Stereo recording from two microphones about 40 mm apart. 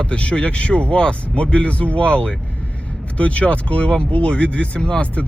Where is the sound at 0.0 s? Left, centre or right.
Left.